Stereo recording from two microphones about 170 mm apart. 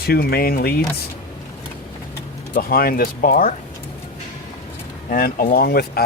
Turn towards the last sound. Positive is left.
turn(degrees=65)  # may be behind; listen again after turning